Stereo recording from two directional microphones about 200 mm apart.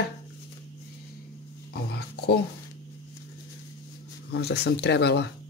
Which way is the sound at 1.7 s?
55° left (ahead or behind).